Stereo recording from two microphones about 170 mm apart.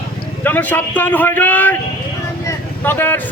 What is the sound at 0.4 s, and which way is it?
A man's voice, 10° left (ahead or behind).